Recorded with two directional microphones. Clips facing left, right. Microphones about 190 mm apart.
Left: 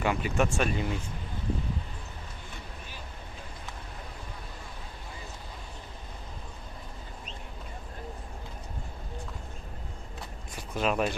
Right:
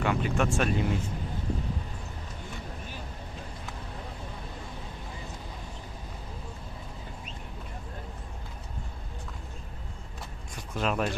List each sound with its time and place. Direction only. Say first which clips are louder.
0.0 s speech: even; 5° left (ahead or behind)
10.7 s speech: left 1 dB; 5° left (ahead or behind)